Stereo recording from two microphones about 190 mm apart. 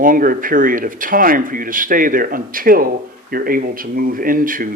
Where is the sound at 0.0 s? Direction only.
45° right (ahead or behind).